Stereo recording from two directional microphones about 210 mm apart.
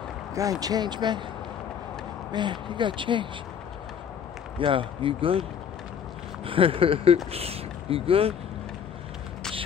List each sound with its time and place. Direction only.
0.3 s speech: 15° right (ahead or behind)
2.3 s speech: 20° right (ahead or behind)
4.6 s speech: 25° right (ahead or behind)
6.4 s speech: 25° right (ahead or behind)